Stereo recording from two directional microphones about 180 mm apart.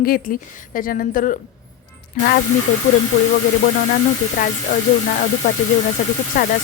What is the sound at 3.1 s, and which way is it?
Speech, 40° left (ahead or behind).